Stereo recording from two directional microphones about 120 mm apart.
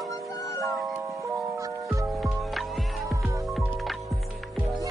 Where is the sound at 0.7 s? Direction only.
Centre (ahead or behind).